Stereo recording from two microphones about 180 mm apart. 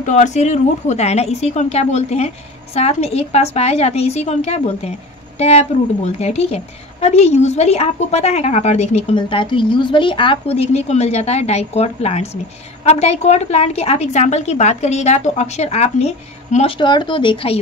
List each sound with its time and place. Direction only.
0.0 s a woman's voice: 40° left (ahead or behind)